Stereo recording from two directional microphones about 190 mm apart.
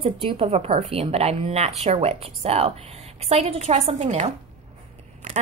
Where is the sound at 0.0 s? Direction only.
30° right (ahead or behind).